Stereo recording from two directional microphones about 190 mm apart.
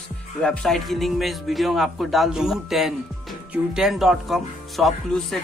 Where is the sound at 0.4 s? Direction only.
5° left (ahead or behind).